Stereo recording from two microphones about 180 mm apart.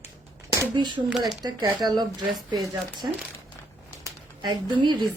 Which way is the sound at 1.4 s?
25° right (ahead or behind).